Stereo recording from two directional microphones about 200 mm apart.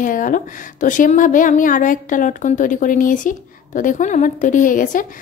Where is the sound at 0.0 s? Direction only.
40° left (ahead or behind).